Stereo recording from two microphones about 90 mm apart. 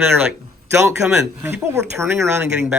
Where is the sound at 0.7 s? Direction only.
30° right (ahead or behind).